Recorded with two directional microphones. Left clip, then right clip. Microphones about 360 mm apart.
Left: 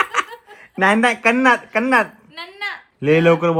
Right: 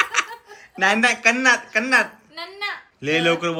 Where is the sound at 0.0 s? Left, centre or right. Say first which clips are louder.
Left 1 dB; centre.